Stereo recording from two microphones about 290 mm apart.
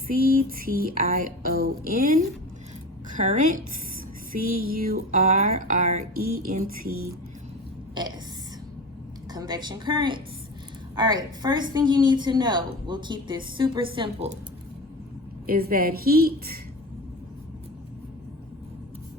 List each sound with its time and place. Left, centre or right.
0.1 s a sound: right
9.3 s a woman's voice: centre
15.4 s a woman's voice: right